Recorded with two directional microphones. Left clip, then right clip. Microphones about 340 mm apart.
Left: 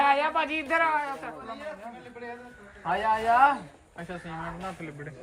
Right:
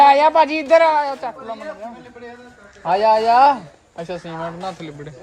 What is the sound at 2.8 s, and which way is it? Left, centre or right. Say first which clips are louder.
Speech: right 10 dB; centre.